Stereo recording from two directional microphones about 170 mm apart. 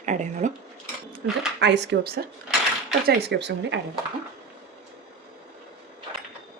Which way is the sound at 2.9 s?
85° right.